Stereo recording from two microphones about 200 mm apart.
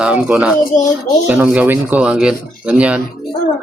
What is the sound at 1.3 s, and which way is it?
Speech, 5° right (ahead or behind).